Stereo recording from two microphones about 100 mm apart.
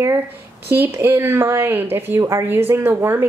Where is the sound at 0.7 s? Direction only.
25° right (ahead or behind).